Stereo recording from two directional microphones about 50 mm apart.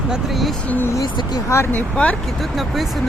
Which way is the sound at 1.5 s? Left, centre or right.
Left.